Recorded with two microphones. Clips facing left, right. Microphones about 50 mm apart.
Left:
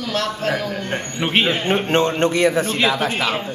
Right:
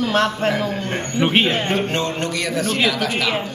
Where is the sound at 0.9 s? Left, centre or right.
Centre.